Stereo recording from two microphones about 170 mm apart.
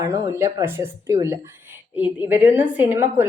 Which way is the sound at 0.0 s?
15° right (ahead or behind).